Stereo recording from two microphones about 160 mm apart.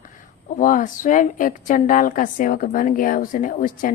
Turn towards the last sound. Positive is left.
turn(degrees=55)  # may be behind; listen again after turning